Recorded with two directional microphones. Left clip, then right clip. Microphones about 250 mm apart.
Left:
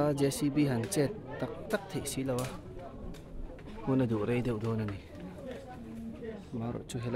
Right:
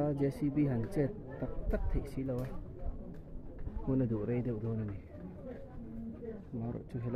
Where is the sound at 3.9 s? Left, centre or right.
Left.